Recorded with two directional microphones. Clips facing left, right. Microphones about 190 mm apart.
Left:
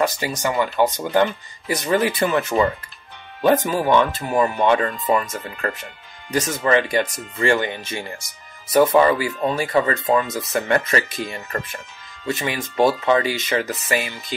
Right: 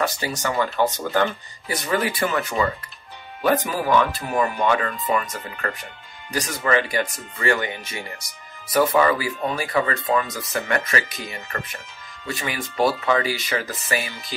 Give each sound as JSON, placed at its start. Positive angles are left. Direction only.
{"t": 0.0, "sound": "speech", "side_deg": 15}
{"t": 12.3, "sound": "speech", "side_deg": 20}